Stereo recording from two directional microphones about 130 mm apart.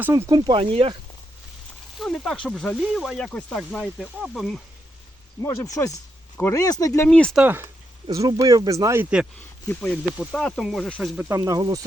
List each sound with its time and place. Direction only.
0.0 s speech: 20° right (ahead or behind); by 0.9 s 45° right (ahead or behind)
2.0 s speech: 5° left (ahead or behind)
5.4 s speech: 25° left (ahead or behind)
7.1 s speech: 10° left (ahead or behind)
7.3 s speech: 15° right (ahead or behind)
8.1 s speech: 25° right (ahead or behind)
9.6 s speech: 10° left (ahead or behind)
11.2 s speech: 25° right (ahead or behind)